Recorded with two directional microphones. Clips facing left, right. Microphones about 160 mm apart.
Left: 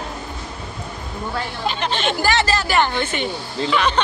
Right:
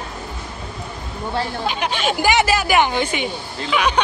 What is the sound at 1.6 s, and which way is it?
Speech, 10° right (ahead or behind).